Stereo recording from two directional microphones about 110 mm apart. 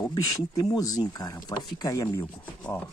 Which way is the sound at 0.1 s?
35° left (ahead or behind).